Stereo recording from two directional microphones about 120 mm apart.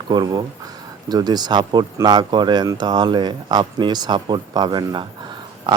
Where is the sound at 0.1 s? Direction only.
35° right (ahead or behind).